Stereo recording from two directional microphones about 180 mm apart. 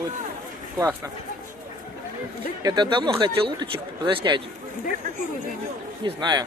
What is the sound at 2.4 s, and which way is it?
Speech, 25° right (ahead or behind).